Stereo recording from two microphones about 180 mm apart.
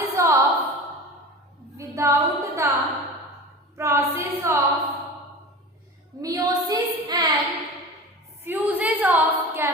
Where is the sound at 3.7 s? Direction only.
15° right (ahead or behind).